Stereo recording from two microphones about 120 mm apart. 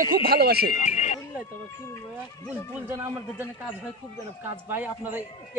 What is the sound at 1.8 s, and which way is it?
Speech, 25° left (ahead or behind).